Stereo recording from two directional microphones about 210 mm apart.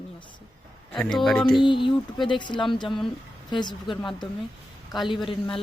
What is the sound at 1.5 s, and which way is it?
Speech, 20° left (ahead or behind).